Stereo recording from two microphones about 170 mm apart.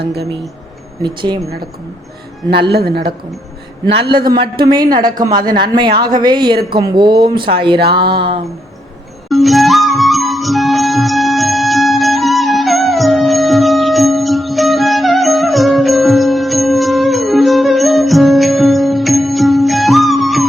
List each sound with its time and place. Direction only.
0.0 s speech: 75° right (ahead or behind)
1.0 s speech: 25° right (ahead or behind)
4.3 s speech: 25° right (ahead or behind)
9.3 s music: centre (ahead or behind)